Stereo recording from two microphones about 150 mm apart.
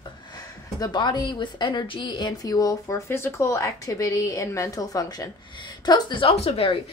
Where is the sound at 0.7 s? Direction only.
25° left (ahead or behind).